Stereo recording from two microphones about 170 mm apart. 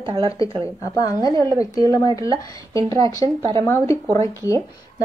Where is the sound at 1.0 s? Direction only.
20° left (ahead or behind).